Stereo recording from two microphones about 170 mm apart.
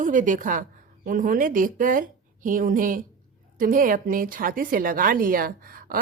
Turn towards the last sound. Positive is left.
turn(degrees=-60)  # may be behind; listen again after turning